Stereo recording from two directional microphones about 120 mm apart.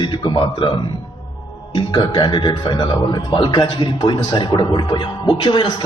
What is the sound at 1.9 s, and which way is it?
A man's voice, 40° left (ahead or behind).